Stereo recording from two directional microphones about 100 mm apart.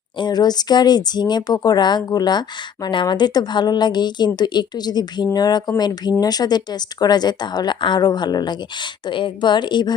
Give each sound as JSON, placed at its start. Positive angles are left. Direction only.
{"t": 0.2, "sound": "speech", "side_deg": 45}